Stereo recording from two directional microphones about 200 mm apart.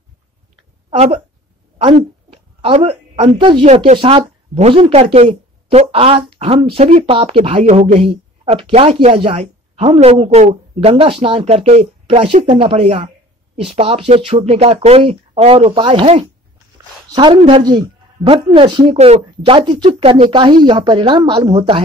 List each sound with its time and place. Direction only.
0.8 s a woman's voice: 30° right (ahead or behind)